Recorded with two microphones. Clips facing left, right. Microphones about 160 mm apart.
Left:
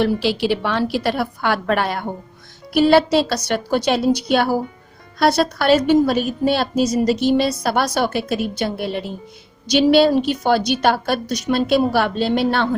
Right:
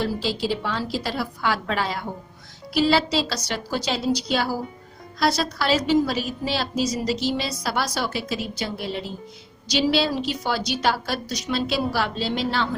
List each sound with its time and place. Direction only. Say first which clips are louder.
0.0 s a woman's voice: left 7 dB; 70° left (ahead or behind)